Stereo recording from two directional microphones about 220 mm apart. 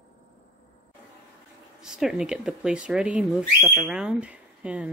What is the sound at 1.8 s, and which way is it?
Speech, centre (ahead or behind).